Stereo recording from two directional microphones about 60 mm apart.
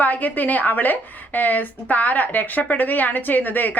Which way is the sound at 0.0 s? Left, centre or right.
Left.